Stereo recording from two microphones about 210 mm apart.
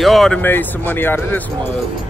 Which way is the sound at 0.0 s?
Centre (ahead or behind).